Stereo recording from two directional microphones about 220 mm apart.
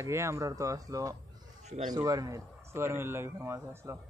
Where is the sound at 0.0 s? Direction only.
15° right (ahead or behind).